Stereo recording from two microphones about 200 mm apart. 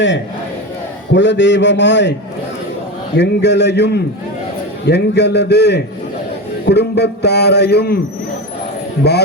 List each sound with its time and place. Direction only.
1.1 s a man's voice: 65° left (ahead or behind)
3.2 s a man's voice: 60° left (ahead or behind)